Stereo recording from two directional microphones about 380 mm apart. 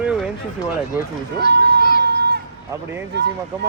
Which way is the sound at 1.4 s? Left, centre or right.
Left.